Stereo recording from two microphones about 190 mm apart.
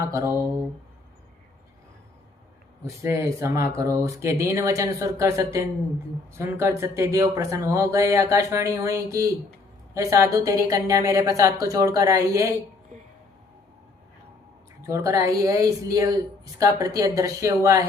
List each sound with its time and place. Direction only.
0.1 s speech: 15° right (ahead or behind)
2.8 s speech: 15° right (ahead or behind)
14.8 s speech: 15° right (ahead or behind)